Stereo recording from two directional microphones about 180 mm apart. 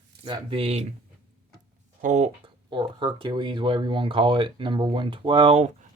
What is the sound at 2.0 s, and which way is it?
Speech, 40° right (ahead or behind).